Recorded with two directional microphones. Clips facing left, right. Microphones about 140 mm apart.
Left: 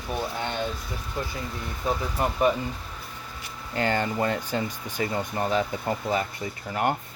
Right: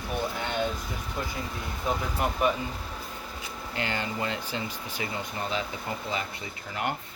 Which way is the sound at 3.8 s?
45° left (ahead or behind).